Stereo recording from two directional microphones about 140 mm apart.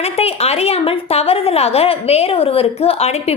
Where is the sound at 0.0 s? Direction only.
45° left (ahead or behind).